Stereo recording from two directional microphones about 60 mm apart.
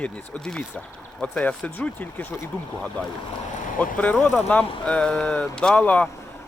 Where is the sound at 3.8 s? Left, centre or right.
Left.